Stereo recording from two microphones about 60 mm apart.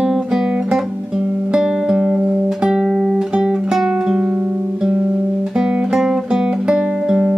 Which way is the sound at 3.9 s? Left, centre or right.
Right.